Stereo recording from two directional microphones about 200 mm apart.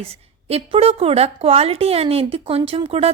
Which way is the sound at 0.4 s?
30° right (ahead or behind).